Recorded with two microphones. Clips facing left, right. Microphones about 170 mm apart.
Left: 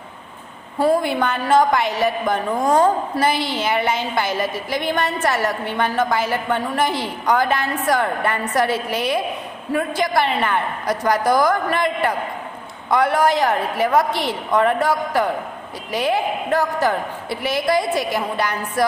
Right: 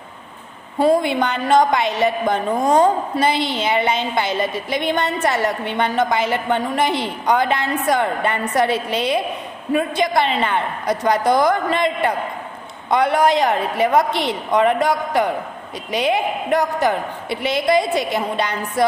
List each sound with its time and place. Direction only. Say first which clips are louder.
0.8 s a woman's voice: right 2 dB; 20° right (ahead or behind)